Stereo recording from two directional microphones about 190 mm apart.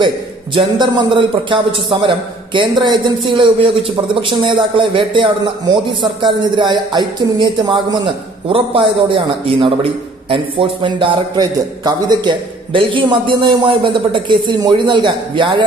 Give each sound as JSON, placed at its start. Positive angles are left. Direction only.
{"t": 0.6, "sound": "a man's voice", "side_deg": -25}